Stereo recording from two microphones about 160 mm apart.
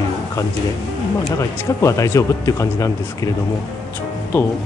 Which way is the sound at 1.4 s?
20° left (ahead or behind).